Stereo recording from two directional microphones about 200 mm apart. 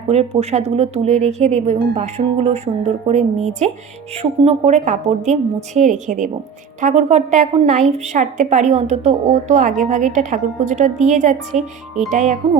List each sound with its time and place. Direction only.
0.1 s speech: 30° right (ahead or behind)